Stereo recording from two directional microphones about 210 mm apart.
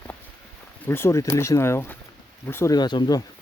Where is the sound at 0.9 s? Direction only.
10° left (ahead or behind).